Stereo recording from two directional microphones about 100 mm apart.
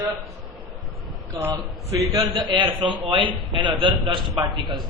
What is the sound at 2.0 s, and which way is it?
Speech, 35° right (ahead or behind).